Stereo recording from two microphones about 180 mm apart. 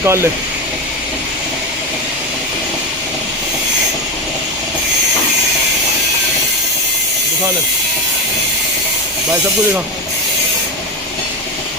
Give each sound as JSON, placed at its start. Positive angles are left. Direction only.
{"t": 0.0, "sound": "speech", "side_deg": -15}